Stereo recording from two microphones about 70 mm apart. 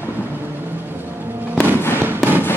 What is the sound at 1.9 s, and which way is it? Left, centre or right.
Fireworks, right.